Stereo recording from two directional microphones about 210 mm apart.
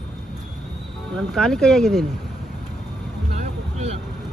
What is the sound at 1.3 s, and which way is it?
Speech, centre (ahead or behind).